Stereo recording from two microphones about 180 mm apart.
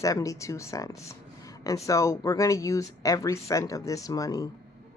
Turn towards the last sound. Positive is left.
turn(degrees=20)  # may be behind; listen again after turning